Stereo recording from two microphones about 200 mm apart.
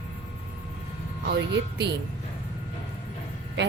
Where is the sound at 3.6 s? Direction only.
60° right (ahead or behind).